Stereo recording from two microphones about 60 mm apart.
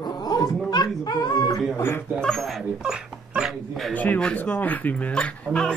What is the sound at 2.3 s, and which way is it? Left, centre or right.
Speech, centre.